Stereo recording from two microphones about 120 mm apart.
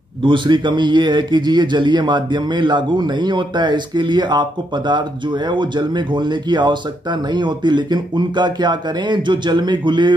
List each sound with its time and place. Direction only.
0.2 s a man's voice: 40° right (ahead or behind)